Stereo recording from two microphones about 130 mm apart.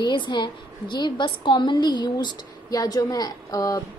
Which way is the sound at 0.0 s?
35° left (ahead or behind).